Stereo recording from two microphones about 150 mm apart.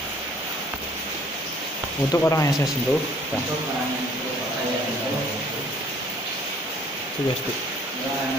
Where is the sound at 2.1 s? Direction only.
20° left (ahead or behind).